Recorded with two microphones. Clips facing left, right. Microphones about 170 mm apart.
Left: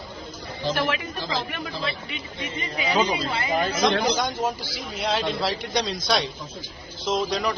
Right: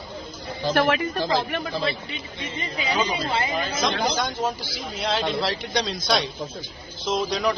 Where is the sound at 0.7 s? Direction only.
55° right (ahead or behind).